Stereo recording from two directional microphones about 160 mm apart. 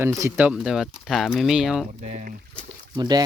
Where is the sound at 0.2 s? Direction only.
15° right (ahead or behind).